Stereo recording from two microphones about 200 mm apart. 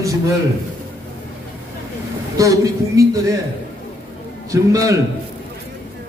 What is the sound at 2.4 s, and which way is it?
Speech, 15° right (ahead or behind).